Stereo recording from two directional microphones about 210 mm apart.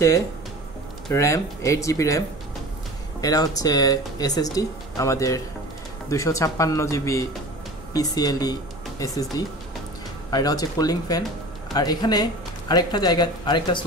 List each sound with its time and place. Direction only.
1.1 s speech: 15° left (ahead or behind)
10.3 s speech: 15° left (ahead or behind)